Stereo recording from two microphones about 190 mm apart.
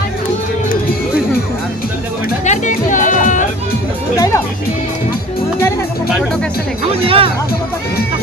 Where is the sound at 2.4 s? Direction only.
40° left (ahead or behind).